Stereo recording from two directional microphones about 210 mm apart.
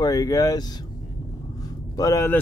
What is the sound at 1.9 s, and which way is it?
Speech, 15° left (ahead or behind).